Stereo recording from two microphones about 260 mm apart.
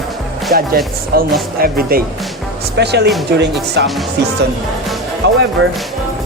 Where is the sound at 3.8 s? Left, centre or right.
Right.